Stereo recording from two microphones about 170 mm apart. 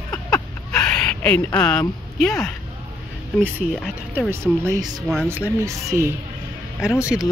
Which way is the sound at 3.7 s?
Centre (ahead or behind).